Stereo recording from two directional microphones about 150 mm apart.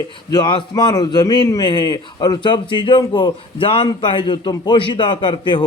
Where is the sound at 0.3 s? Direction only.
30° left (ahead or behind).